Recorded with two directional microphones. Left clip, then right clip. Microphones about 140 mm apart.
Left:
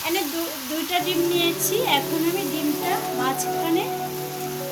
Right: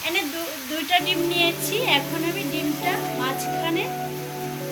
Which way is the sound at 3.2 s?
65° left (ahead or behind).